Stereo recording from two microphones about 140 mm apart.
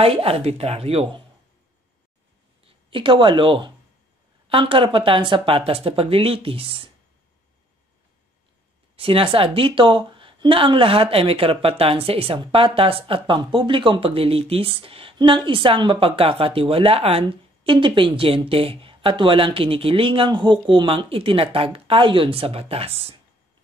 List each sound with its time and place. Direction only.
0.0 s speech: 45° right (ahead or behind)
2.6 s a woman's voice: 35° right (ahead or behind)
8.9 s a woman's voice: 40° right (ahead or behind)